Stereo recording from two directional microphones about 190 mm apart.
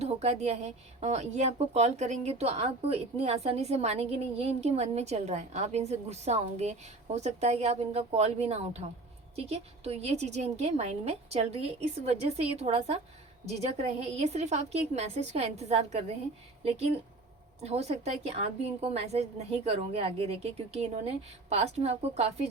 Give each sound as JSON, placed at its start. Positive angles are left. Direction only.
{"t": 0.0, "sound": "a woman's voice", "side_deg": -35}
{"t": 17.6, "sound": "a woman's voice", "side_deg": -35}